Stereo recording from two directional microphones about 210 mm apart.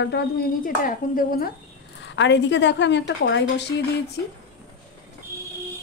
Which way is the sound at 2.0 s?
55° left (ahead or behind).